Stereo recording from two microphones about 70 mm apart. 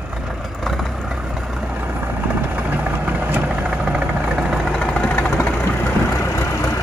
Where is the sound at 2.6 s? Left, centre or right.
Right.